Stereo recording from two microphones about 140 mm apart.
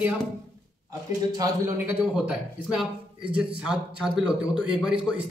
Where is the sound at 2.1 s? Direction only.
5° right (ahead or behind).